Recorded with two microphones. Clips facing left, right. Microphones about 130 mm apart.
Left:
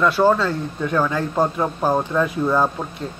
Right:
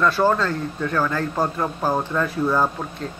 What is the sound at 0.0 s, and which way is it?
Speech, 10° left (ahead or behind).